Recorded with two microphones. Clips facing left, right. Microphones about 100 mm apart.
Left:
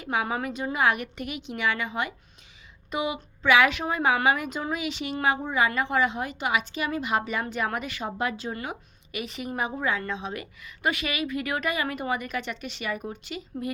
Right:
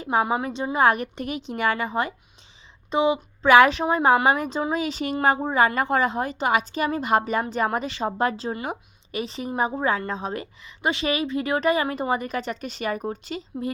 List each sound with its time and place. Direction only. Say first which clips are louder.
0.0 s a woman's voice: right 5 dB; 35° right (ahead or behind)
2.9 s a woman's voice: right 8 dB; 25° right (ahead or behind)
3.4 s a woman's voice: right 6 dB; 40° right (ahead or behind)
9.2 s a woman's voice: right 5 dB; 30° right (ahead or behind)